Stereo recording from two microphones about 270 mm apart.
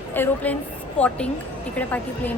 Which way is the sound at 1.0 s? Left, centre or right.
Centre.